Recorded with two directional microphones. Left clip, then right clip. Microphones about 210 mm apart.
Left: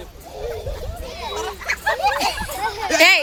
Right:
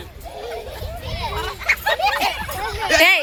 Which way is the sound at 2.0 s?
20° right (ahead or behind).